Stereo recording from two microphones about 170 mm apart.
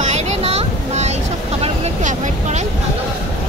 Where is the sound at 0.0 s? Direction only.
40° right (ahead or behind).